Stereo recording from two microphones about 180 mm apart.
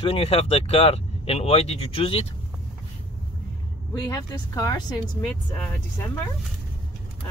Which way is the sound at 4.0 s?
20° left (ahead or behind).